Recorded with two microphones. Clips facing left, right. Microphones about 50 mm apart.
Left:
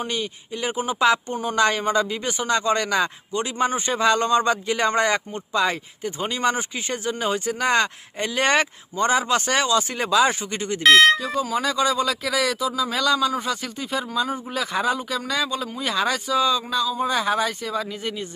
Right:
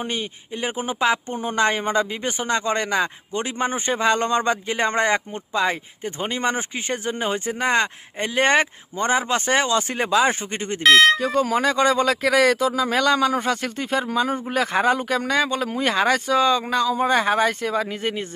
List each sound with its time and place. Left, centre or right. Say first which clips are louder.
0.0 s speech: even; right
1.0 s speech: left 2 dB; centre
6.1 s speech: left 1 dB; right
10.8 s speech: even; centre
11.5 s a man's voice: right 2 dB; right